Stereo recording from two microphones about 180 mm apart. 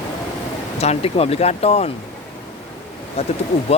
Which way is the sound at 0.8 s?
35° left (ahead or behind).